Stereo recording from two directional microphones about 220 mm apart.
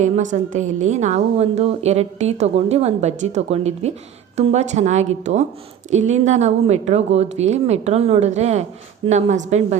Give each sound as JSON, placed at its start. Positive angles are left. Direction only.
{"t": 0.0, "sound": "a woman's voice", "side_deg": -35}